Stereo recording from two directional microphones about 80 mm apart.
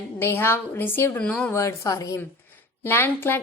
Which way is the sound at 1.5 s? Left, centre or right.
Left.